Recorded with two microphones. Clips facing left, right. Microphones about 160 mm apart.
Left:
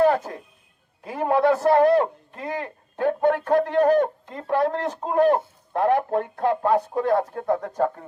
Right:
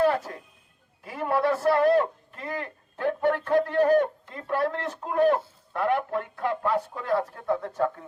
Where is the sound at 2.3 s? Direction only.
40° left (ahead or behind).